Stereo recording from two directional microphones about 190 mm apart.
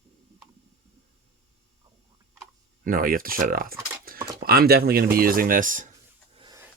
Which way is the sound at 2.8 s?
50° right (ahead or behind).